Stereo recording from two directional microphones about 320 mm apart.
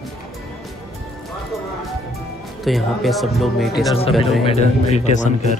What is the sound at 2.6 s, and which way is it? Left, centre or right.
Speech, centre.